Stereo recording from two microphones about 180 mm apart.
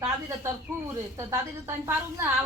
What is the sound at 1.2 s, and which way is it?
A woman's voice, 15° right (ahead or behind).